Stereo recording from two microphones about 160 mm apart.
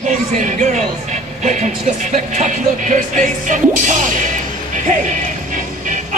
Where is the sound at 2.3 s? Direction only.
50° right (ahead or behind).